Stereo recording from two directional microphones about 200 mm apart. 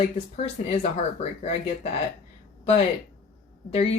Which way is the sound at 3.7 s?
30° left (ahead or behind).